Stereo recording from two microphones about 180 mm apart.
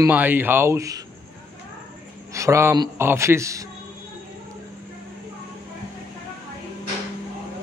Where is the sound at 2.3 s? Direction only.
15° right (ahead or behind).